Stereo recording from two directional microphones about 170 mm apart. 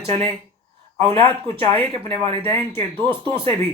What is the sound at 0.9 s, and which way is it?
A man's voice, 35° right (ahead or behind).